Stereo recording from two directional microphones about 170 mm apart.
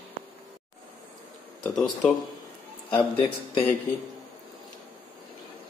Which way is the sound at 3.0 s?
30° left (ahead or behind).